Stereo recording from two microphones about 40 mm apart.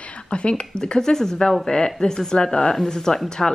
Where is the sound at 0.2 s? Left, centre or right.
Left.